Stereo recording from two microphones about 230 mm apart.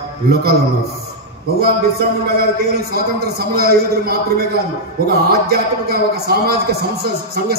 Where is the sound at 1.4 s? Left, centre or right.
Right.